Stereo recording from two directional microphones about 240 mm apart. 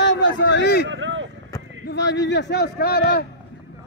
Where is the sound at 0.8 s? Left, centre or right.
Right.